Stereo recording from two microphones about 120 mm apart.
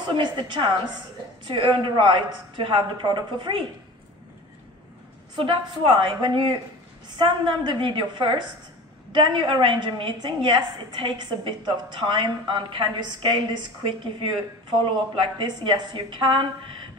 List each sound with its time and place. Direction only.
0.0 s a woman's voice: 40° right (ahead or behind)
5.3 s a woman's voice: 45° right (ahead or behind)
15.4 s a woman's voice: 40° right (ahead or behind)